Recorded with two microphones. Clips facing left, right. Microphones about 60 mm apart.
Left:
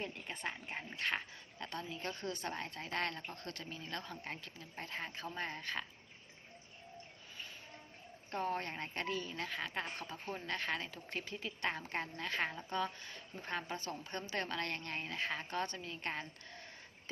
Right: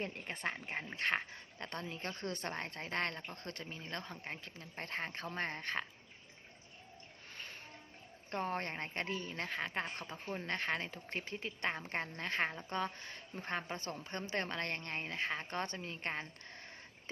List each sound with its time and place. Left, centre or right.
0.0 s speech: right
4.8 s speech: right
7.3 s music: right
8.3 s speech: right